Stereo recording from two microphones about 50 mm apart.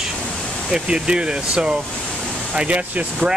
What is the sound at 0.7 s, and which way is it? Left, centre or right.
Speech, centre.